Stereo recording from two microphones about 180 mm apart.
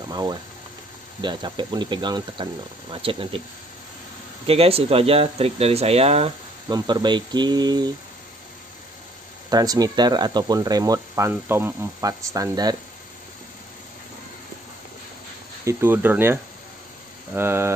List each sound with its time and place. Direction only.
0.1 s speech: 25° right (ahead or behind)
4.5 s speech: 35° right (ahead or behind)
6.7 s speech: 25° right (ahead or behind)
9.5 s speech: 20° right (ahead or behind)
15.6 s speech: 15° right (ahead or behind)